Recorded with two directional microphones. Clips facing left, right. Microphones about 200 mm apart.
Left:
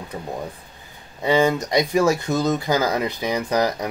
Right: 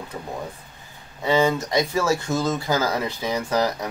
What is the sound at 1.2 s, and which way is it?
Speech, 15° left (ahead or behind).